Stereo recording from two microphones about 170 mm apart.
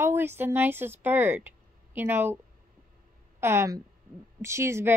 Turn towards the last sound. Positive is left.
turn(degrees=-15)  # may be behind; listen again after turning